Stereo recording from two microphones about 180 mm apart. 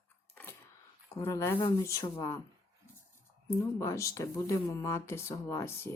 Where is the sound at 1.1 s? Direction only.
20° left (ahead or behind).